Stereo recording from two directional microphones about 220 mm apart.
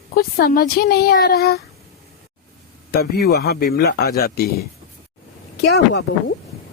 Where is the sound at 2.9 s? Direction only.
45° left (ahead or behind).